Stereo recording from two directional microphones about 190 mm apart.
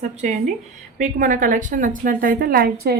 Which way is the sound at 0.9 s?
40° right (ahead or behind).